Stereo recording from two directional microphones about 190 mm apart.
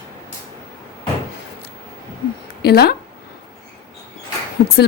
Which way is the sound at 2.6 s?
55° left (ahead or behind).